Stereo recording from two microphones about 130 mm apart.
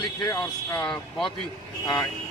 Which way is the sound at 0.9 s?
5° left (ahead or behind).